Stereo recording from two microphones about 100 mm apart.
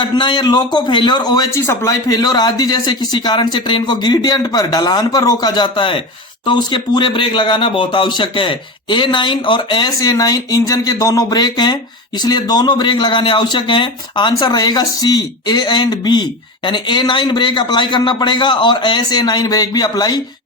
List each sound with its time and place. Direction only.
0.0 s speech: 50° left (ahead or behind)
1.6 s speech: 25° left (ahead or behind)
1.9 s speech: 40° left (ahead or behind)